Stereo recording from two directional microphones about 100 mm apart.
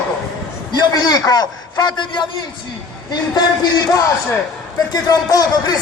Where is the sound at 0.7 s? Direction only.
45° left (ahead or behind).